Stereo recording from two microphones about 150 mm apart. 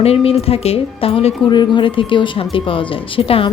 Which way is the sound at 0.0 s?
40° left (ahead or behind).